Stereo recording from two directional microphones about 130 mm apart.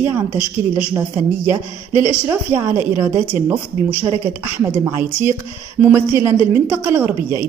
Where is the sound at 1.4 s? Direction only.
15° right (ahead or behind).